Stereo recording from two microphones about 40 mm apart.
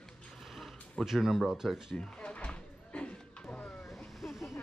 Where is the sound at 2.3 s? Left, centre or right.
Left.